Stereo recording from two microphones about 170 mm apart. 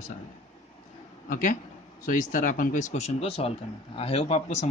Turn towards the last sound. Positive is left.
turn(degrees=40)  # may be behind; listen again after turning